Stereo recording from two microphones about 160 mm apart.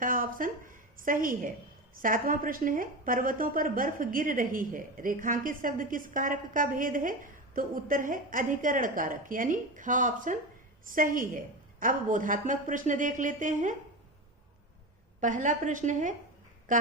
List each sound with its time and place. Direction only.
0.0 s a woman's voice: 60° right (ahead or behind)
15.2 s a woman's voice: 50° right (ahead or behind)